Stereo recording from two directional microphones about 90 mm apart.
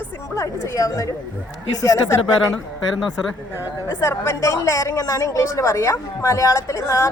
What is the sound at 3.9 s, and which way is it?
A woman's voice, 25° left (ahead or behind).